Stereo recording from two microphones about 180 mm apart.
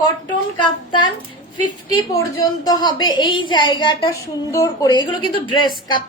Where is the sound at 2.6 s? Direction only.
20° left (ahead or behind).